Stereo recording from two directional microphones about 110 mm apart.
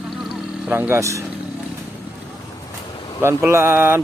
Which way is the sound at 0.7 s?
20° right (ahead or behind).